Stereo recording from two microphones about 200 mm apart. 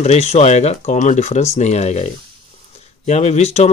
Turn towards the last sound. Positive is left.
turn(degrees=35)  # may be behind; listen again after turning